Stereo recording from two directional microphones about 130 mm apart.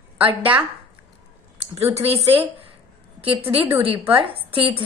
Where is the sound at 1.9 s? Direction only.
50° right (ahead or behind).